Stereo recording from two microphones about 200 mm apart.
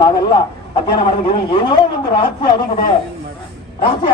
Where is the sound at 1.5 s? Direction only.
20° left (ahead or behind).